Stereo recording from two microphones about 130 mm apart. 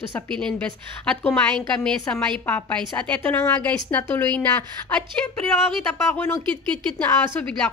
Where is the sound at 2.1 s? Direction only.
15° left (ahead or behind).